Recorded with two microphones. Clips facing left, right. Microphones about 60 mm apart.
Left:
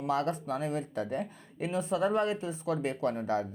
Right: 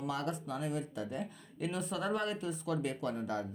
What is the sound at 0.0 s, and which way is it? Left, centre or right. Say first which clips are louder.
Speech: left 6 dB; left.